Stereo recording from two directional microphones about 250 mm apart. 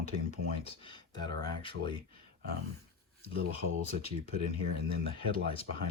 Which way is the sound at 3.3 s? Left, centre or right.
Left.